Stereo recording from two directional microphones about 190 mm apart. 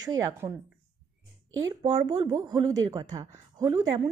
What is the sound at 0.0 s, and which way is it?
Speech, 20° right (ahead or behind).